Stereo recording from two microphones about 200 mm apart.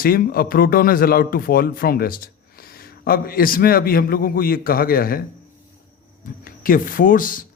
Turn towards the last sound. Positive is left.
turn(degrees=45)  # may be behind; listen again after turning